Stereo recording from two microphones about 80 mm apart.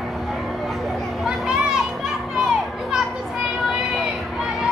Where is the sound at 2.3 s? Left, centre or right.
Centre.